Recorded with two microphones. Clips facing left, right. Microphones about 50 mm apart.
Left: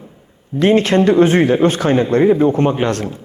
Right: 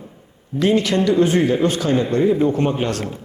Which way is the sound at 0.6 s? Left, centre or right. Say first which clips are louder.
Left 5 dB; left.